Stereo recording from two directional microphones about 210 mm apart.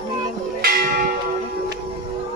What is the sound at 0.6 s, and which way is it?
Church bell, 45° right (ahead or behind).